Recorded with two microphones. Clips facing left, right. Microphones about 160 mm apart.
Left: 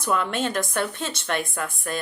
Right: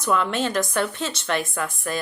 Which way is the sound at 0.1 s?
50° left (ahead or behind).